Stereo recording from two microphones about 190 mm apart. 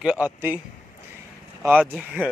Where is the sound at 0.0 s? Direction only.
5° right (ahead or behind).